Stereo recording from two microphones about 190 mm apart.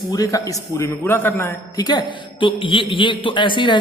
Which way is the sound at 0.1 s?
15° left (ahead or behind).